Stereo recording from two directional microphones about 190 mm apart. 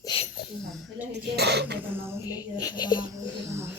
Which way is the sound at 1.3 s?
60° right (ahead or behind).